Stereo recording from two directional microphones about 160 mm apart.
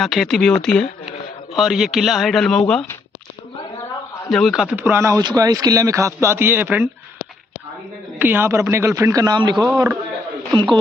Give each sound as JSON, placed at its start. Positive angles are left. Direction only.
{"t": 0.0, "sound": "speech", "side_deg": 0}
{"t": 4.3, "sound": "a man's voice", "side_deg": 0}
{"t": 8.2, "sound": "speech", "side_deg": -10}